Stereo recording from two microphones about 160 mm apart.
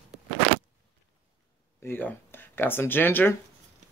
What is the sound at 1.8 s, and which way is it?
Speech, 15° left (ahead or behind).